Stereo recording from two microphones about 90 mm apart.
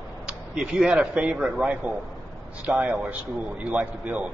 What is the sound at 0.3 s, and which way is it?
Speech, 5° right (ahead or behind).